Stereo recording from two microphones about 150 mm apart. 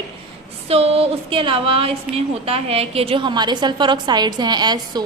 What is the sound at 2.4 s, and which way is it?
A woman's voice, 40° right (ahead or behind).